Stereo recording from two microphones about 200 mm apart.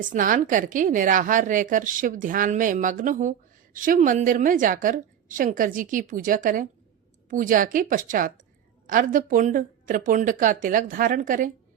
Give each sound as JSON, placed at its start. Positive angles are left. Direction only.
{"t": 0.0, "sound": "a woman's voice", "side_deg": -40}